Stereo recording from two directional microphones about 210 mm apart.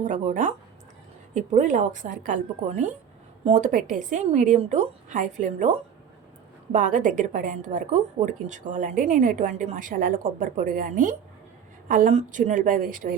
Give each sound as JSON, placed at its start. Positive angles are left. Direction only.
{"t": 0.0, "sound": "a woman's voice", "side_deg": -35}
{"t": 6.7, "sound": "a woman's voice", "side_deg": -35}